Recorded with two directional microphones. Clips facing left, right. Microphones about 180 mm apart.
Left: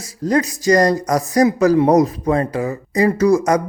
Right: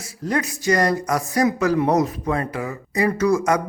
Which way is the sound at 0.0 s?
40° left (ahead or behind).